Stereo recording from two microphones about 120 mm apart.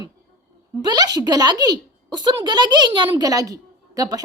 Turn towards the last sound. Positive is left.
turn(degrees=-30)  # may be behind; listen again after turning